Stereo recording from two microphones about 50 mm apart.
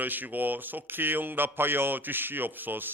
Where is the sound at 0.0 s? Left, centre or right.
Right.